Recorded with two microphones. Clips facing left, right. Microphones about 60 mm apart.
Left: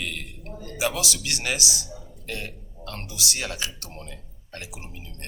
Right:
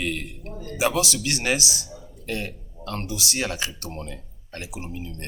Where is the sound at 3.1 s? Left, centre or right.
Right.